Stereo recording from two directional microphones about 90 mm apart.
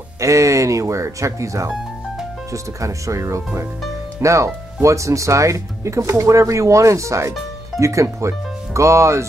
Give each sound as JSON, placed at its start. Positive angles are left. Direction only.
{"t": 0.2, "sound": "speech", "side_deg": -35}